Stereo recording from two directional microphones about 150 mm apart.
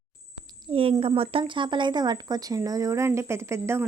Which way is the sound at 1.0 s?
40° right (ahead or behind).